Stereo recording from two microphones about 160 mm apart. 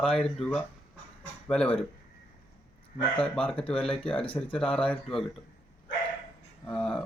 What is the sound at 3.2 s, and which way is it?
Speech, 5° left (ahead or behind).